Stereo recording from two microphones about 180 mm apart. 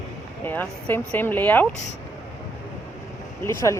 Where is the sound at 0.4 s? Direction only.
10° left (ahead or behind).